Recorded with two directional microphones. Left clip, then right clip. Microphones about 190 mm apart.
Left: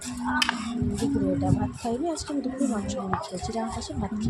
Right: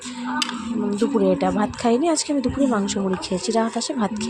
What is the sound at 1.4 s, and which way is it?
A woman's voice, 40° right (ahead or behind).